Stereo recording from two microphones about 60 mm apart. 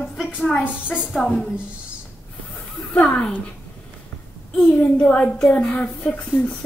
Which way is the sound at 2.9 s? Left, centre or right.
Centre.